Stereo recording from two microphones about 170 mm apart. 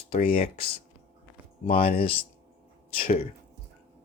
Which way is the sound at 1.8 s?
35° left (ahead or behind).